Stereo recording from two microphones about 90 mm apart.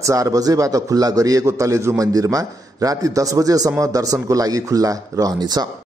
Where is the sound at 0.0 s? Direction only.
40° right (ahead or behind).